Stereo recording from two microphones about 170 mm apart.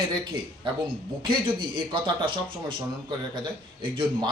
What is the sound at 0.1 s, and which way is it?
Speech, 25° right (ahead or behind).